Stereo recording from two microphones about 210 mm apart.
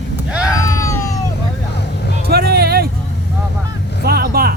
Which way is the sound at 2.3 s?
50° right (ahead or behind).